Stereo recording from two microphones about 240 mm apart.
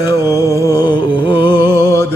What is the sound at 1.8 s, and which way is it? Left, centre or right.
Music, centre.